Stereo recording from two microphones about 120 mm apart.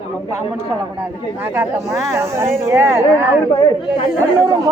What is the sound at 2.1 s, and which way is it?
Speech, 20° right (ahead or behind).